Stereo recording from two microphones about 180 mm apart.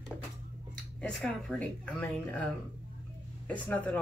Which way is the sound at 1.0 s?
5° left (ahead or behind).